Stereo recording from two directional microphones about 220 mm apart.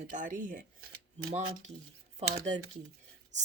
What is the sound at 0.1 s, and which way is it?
Speech, 35° right (ahead or behind).